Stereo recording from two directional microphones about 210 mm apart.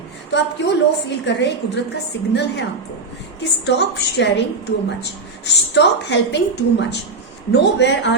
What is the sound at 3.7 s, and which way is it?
A woman's voice, 55° left (ahead or behind).